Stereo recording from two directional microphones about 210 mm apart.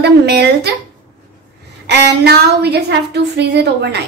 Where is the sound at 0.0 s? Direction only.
50° right (ahead or behind).